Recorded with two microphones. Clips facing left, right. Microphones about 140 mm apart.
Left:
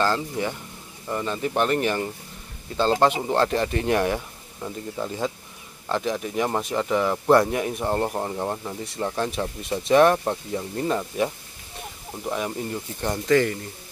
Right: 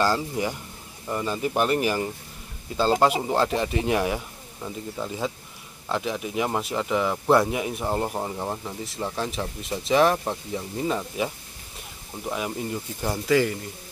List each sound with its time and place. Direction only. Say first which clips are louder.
0.0 s speech: even; 10° right (ahead or behind)